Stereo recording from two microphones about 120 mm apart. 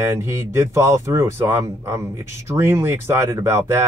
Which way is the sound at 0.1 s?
20° right (ahead or behind).